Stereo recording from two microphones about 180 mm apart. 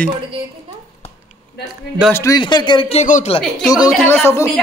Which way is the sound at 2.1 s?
20° left (ahead or behind).